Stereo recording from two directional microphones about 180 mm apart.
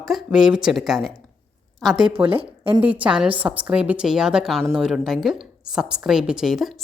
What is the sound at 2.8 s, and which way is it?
A woman's voice, 10° right (ahead or behind).